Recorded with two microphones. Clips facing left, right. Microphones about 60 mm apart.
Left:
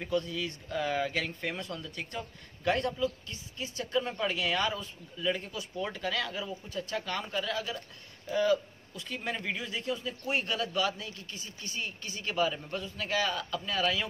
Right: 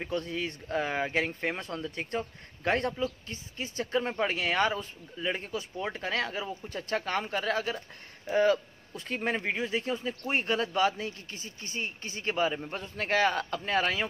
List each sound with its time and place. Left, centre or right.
0.0 s a man's voice: right
12.7 s a man's voice: right